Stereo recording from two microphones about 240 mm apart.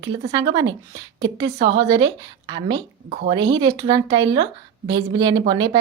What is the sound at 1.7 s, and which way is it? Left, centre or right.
A woman's voice, centre.